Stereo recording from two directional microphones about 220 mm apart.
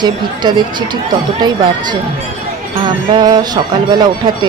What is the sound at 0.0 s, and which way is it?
Speech, 20° right (ahead or behind).